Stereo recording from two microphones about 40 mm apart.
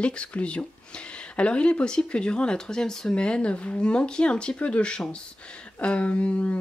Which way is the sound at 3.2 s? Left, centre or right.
Left.